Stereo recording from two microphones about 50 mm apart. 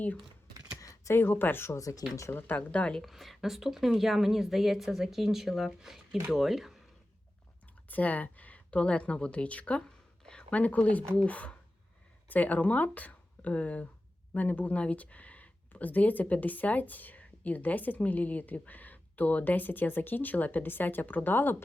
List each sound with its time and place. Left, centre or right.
0.8 s a sound: left
1.1 s speech: left
1.7 s speech: left
2.6 s speech: left
3.0 s speech: centre
7.9 s a woman's voice: left